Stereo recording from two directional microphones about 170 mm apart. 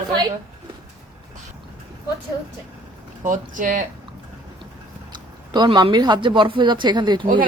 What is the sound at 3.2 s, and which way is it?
Speech, 50° right (ahead or behind).